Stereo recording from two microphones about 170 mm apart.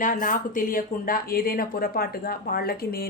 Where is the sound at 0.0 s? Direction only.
50° left (ahead or behind).